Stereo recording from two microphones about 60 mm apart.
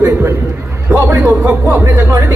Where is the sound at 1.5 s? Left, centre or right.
Right.